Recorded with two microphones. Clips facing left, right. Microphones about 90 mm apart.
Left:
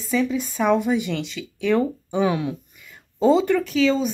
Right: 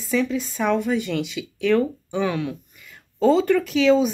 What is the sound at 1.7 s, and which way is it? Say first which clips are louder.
A woman's voice: left 1 dB; 15° left (ahead or behind).